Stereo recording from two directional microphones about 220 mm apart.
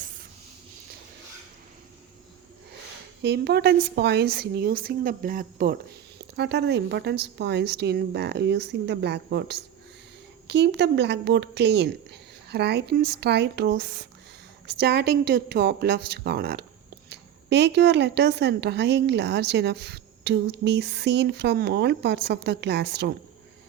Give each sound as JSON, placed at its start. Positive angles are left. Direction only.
{"t": 3.2, "sound": "speech", "side_deg": -50}
{"t": 6.1, "sound": "speech", "side_deg": -50}